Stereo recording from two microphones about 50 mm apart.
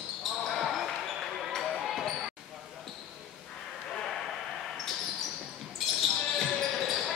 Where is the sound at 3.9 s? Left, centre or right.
Centre.